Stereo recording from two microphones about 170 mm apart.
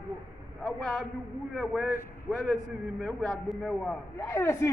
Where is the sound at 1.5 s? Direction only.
10° right (ahead or behind).